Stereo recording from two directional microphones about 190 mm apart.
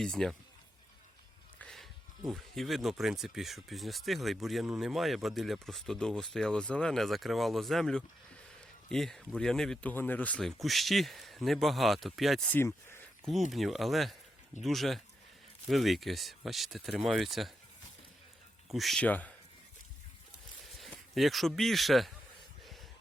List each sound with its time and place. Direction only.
0.0 s speech: 5° left (ahead or behind)
1.5 s speech: 5° left (ahead or behind)
12.5 s speech: 15° left (ahead or behind)
13.5 s speech: centre (ahead or behind)
18.7 s speech: centre (ahead or behind)
20.7 s speech: centre (ahead or behind)